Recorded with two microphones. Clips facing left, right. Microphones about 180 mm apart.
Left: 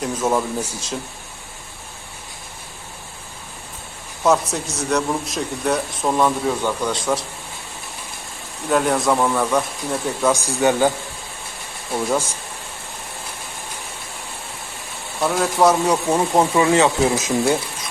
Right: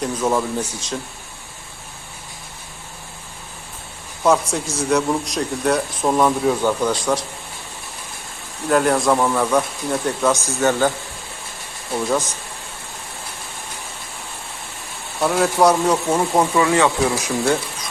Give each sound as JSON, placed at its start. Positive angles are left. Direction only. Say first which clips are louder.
{"t": 0.0, "sound": "speech", "louder": "even", "side_deg": 5}
{"t": 4.2, "sound": "a man's voice", "louder": "right 1 dB", "side_deg": 0}
{"t": 8.7, "sound": "a man's voice", "louder": "right 2 dB", "side_deg": 0}
{"t": 10.3, "sound": "speech", "louder": "left 1 dB", "side_deg": 15}
{"t": 15.2, "sound": "speech", "louder": "right 1 dB", "side_deg": 0}